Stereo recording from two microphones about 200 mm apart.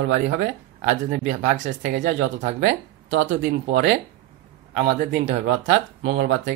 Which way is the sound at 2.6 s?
65° right (ahead or behind).